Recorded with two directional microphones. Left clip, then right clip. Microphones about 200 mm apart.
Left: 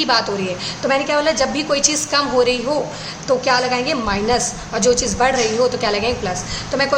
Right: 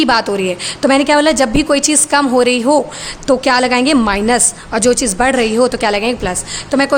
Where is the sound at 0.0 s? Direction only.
45° right (ahead or behind).